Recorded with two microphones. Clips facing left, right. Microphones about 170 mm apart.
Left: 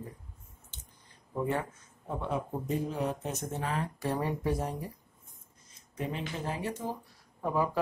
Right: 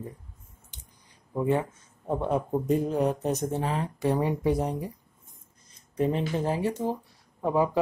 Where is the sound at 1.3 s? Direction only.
20° right (ahead or behind).